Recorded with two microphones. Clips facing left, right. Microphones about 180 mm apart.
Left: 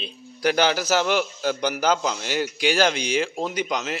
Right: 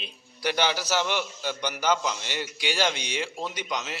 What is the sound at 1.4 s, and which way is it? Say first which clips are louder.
Speech: left 7 dB; 45° left (ahead or behind).